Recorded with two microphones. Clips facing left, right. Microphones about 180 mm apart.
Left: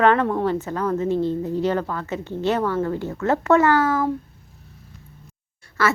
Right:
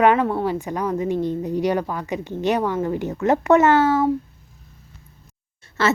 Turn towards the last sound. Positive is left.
turn(degrees=-25)  # may be behind; listen again after turning